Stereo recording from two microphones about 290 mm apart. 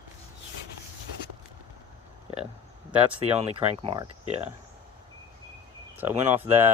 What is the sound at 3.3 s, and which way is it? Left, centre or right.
Speech, centre.